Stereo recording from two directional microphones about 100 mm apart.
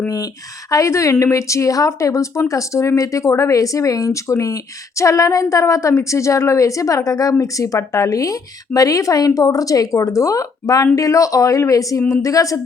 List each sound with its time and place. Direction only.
0.7 s speech: 30° left (ahead or behind)